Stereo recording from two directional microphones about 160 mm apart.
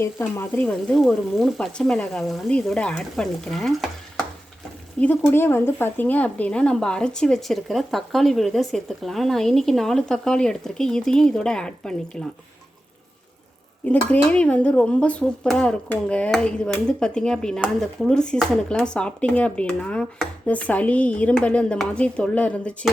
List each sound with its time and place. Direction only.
0.0 s speech: 15° left (ahead or behind); by 3.8 s centre (ahead or behind)
4.9 s speech: 10° left (ahead or behind)
13.8 s speech: 10° left (ahead or behind)